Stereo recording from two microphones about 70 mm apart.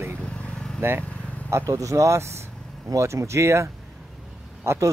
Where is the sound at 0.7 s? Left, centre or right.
Right.